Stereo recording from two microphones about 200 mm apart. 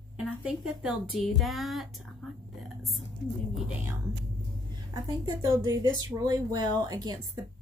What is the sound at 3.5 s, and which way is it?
Speech, 5° right (ahead or behind).